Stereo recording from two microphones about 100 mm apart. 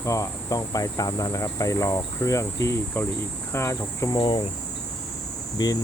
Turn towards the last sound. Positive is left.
turn(degrees=40)  # may be behind; listen again after turning